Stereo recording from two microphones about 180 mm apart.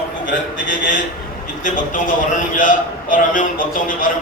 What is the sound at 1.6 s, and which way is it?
A man's voice, 45° left (ahead or behind).